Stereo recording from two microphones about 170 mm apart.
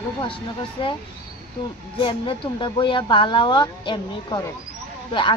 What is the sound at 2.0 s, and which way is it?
Speech, 30° left (ahead or behind).